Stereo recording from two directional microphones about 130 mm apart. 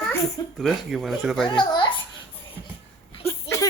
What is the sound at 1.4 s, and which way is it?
Speech, 35° left (ahead or behind).